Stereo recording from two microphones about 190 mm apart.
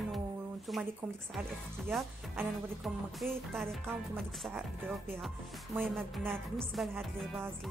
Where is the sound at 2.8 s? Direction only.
Centre (ahead or behind).